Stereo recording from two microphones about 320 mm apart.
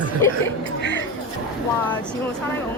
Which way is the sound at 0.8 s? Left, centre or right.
Left.